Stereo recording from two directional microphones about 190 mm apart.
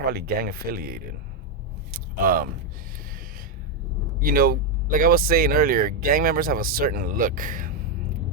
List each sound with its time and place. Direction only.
0.0 s speech: 55° right (ahead or behind)
1.9 s a sound: 50° right (ahead or behind)
4.2 s speech: 50° right (ahead or behind)